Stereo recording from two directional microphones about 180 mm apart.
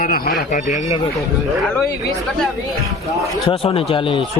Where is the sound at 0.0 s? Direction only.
55° left (ahead or behind).